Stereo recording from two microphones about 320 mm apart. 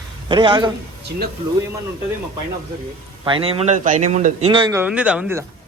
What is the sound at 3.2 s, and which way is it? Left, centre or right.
A man's voice, centre.